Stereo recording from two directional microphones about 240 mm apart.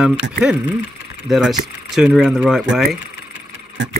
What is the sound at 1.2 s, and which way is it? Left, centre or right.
Speech, centre.